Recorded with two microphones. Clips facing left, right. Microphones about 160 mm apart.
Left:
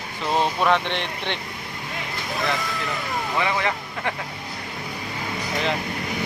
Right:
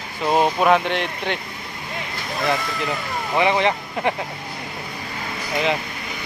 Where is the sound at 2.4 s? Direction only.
Centre (ahead or behind).